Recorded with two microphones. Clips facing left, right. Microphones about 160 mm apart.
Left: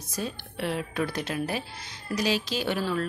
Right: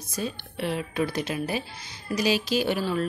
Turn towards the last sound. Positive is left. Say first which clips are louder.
# right 3 dB
turn(degrees=-10)  # may be behind; listen again after turning